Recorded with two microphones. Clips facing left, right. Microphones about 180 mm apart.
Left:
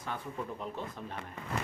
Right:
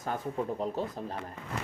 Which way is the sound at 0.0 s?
40° right (ahead or behind).